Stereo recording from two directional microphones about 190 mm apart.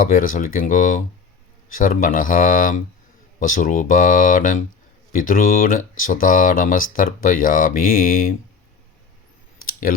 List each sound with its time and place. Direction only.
0.0 s speech: 45° left (ahead or behind)
9.6 s clicking: 50° left (ahead or behind)